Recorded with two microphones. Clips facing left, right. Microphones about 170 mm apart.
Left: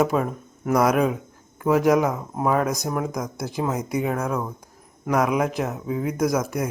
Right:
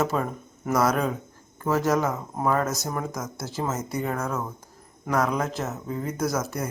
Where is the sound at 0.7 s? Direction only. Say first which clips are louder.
Left 4 dB; 15° left (ahead or behind).